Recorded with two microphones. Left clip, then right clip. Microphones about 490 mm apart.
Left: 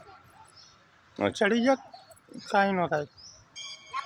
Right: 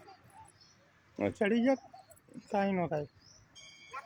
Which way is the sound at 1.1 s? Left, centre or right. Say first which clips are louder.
Left 6 dB; right.